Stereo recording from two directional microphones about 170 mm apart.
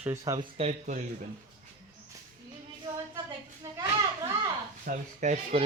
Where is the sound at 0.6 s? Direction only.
40° right (ahead or behind).